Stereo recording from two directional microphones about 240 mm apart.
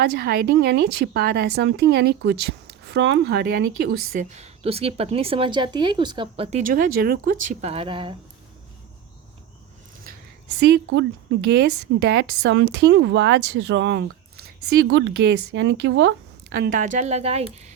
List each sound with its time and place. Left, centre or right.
0.0 s speech: right
6.6 s speech: right
10.6 s a woman's voice: right
16.6 s a woman's voice: right